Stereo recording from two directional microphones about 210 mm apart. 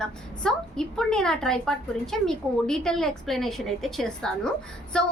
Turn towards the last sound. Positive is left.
turn(degrees=5)  # may be behind; listen again after turning